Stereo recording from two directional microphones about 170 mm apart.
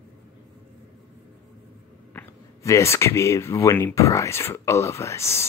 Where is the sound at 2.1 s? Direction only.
15° left (ahead or behind).